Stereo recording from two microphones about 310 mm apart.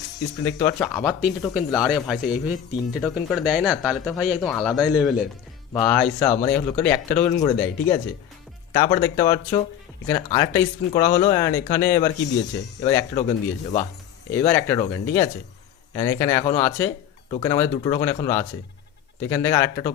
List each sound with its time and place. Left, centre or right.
0.4 s speech: centre
5.7 s speech: centre